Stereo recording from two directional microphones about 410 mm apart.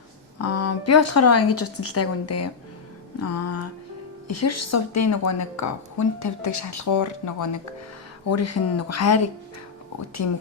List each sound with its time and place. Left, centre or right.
0.4 s a woman's voice: left